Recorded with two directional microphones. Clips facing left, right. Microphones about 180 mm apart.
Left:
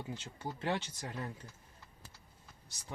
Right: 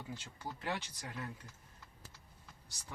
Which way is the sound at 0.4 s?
25° left (ahead or behind).